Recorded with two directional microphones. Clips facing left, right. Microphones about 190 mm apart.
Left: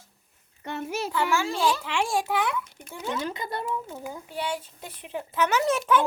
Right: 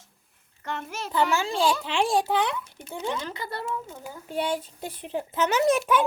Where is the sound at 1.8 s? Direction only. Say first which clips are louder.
Right 3 dB; 35° right (ahead or behind).